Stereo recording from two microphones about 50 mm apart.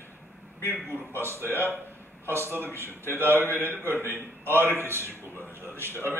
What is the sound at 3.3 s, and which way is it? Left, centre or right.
Speech, left.